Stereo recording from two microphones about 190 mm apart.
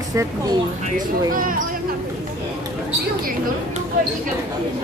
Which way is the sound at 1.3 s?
45° right (ahead or behind).